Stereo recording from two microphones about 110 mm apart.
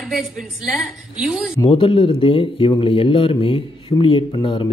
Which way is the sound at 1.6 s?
55° left (ahead or behind).